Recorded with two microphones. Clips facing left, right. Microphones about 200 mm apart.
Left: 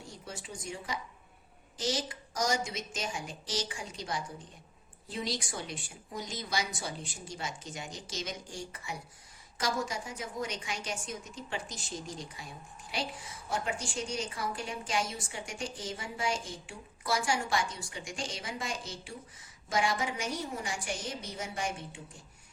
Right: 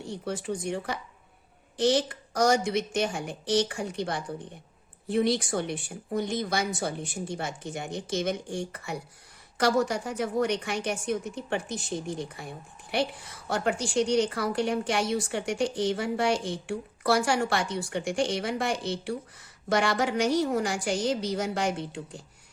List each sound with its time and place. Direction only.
0.0 s a woman's voice: 65° right (ahead or behind)